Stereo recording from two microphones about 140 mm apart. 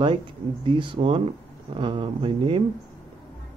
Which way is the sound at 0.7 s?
35° right (ahead or behind).